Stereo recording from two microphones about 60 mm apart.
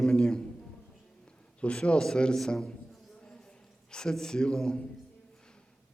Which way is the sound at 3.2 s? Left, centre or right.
Centre.